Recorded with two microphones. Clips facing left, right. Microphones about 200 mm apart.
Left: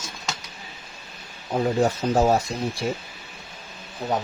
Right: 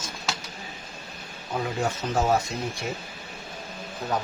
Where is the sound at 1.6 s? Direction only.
35° left (ahead or behind).